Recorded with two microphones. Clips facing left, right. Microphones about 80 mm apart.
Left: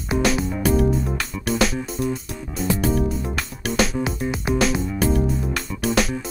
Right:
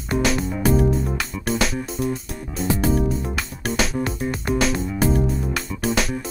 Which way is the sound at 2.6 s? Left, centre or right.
Right.